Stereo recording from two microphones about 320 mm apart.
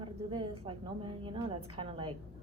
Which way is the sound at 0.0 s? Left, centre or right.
Centre.